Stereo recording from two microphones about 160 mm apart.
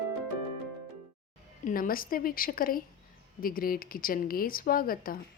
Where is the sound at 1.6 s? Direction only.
65° left (ahead or behind).